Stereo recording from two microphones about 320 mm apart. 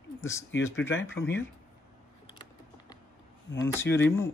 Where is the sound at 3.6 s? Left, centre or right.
Centre.